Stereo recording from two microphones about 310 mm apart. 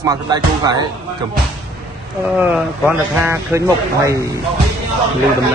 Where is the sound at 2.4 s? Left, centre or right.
Centre.